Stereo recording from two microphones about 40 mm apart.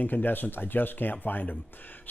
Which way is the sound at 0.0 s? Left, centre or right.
Left.